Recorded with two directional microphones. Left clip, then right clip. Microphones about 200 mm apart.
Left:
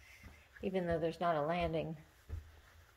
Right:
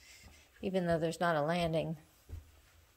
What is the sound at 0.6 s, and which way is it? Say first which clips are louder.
Speech: right 3 dB; 30° right (ahead or behind).